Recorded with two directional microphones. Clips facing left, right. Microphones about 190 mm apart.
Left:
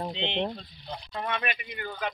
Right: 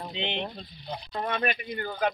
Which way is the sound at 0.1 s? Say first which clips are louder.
Left 2 dB; 10° right (ahead or behind).